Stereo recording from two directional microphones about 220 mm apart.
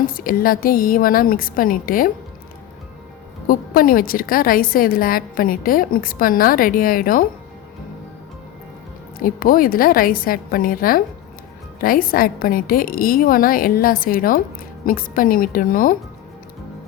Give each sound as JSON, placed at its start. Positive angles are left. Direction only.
{"t": 0.0, "sound": "a woman's voice", "side_deg": 40}
{"t": 3.4, "sound": "a woman's voice", "side_deg": 40}
{"t": 9.1, "sound": "a woman's voice", "side_deg": 40}